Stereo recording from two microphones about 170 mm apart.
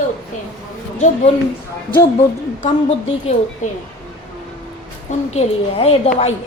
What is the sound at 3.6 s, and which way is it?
Speech, 45° left (ahead or behind).